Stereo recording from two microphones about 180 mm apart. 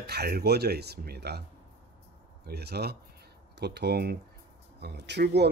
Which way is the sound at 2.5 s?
65° right (ahead or behind).